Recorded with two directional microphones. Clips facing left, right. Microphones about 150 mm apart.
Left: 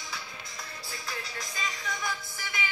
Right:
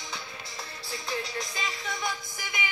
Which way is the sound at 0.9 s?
25° right (ahead or behind).